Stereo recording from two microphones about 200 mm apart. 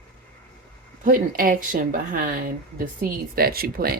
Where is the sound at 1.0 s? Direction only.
45° right (ahead or behind).